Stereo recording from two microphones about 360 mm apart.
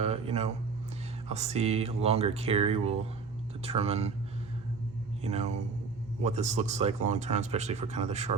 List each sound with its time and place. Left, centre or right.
0.0 s a sound: centre
1.3 s speech: centre
5.2 s speech: centre